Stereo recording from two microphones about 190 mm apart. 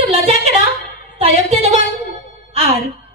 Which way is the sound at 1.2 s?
35° right (ahead or behind).